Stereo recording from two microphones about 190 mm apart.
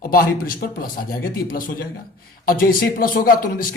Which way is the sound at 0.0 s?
50° left (ahead or behind).